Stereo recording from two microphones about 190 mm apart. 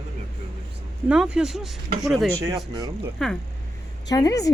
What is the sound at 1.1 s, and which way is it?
Speech, 5° right (ahead or behind).